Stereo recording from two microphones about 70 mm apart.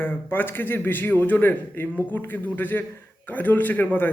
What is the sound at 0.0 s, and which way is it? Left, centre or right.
A man's voice, left.